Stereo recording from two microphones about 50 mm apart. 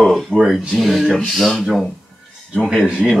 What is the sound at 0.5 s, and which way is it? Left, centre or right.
Speech, centre.